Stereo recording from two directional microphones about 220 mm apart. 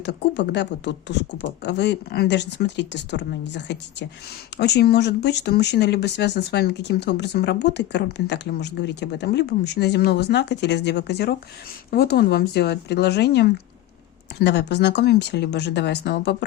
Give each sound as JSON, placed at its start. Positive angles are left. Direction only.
{"t": 0.0, "sound": "speech", "side_deg": 50}